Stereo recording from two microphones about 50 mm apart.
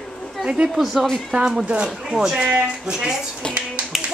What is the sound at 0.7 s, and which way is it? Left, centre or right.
Speech, centre.